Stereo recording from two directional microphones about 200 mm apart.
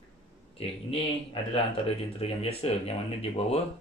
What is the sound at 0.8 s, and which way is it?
Speech, 30° left (ahead or behind).